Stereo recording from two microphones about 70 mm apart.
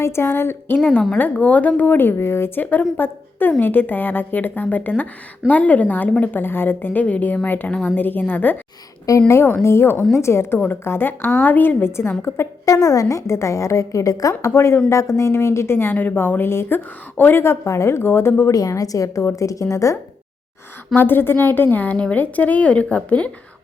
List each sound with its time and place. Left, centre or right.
0.0 s speech: left
1.2 s a woman's voice: left
9.0 s a woman's voice: left
9.4 s speech: left
12.6 s a woman's voice: left
18.5 s a woman's voice: left
20.9 s a woman's voice: left